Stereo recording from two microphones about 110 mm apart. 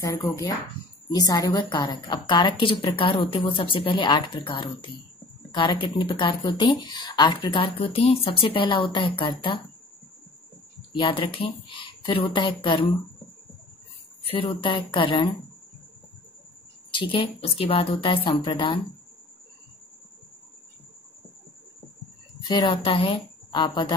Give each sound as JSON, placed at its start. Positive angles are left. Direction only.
{"t": 1.1, "sound": "speech", "side_deg": 35}
{"t": 10.9, "sound": "speech", "side_deg": 45}
{"t": 14.2, "sound": "speech", "side_deg": 55}
{"t": 16.9, "sound": "speech", "side_deg": 50}
{"t": 22.4, "sound": "a woman's voice", "side_deg": 40}
{"t": 22.8, "sound": "a woman's voice", "side_deg": 55}